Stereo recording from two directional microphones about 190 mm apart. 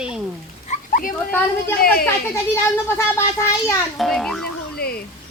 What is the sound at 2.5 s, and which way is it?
Speech, 15° left (ahead or behind).